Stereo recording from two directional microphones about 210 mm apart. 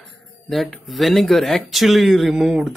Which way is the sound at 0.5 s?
Centre (ahead or behind).